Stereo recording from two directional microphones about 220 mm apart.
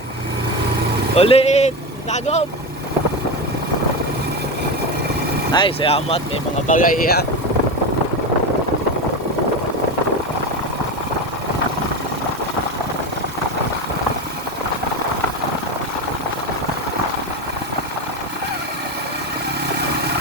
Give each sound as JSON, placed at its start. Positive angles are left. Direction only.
{"t": 1.1, "sound": "speech", "side_deg": 25}
{"t": 5.5, "sound": "speech", "side_deg": 20}
{"t": 6.7, "sound": "speech", "side_deg": 45}